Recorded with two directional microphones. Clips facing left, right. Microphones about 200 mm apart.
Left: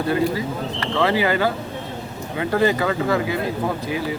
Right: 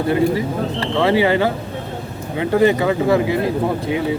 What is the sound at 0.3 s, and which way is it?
Speech, 25° right (ahead or behind).